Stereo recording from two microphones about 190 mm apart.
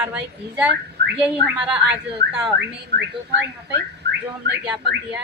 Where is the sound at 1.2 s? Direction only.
5° right (ahead or behind).